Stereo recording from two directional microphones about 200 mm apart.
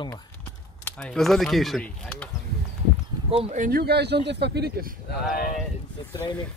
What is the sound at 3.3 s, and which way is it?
Speech, 30° right (ahead or behind).